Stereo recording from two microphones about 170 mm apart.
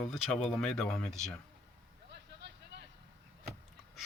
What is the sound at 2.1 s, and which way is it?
Vehicle, 80° right.